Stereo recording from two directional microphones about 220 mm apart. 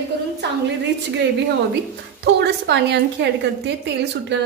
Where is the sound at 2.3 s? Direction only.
50° right (ahead or behind).